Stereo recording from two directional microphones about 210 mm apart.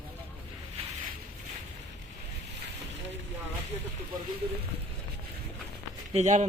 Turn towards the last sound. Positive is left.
turn(degrees=-35)  # may be behind; listen again after turning